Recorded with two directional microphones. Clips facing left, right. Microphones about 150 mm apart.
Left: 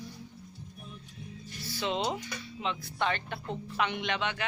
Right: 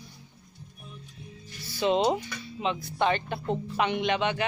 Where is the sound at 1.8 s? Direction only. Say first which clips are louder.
Right 8 dB; 20° right (ahead or behind).